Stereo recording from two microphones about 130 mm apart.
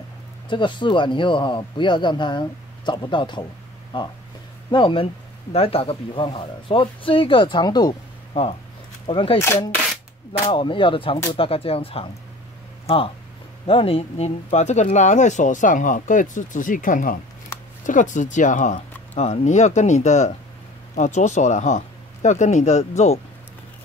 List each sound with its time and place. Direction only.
0.5 s a man's voice: 40° left (ahead or behind)
8.3 s speech: 45° left (ahead or behind)
10.5 s a man's voice: 40° left (ahead or behind); by 17.2 s 90° left
17.8 s speech: 75° left (ahead or behind)
19.1 s speech: 60° left (ahead or behind)